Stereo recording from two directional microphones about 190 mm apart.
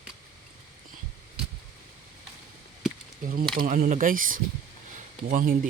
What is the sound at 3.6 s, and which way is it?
Speech, 45° right (ahead or behind).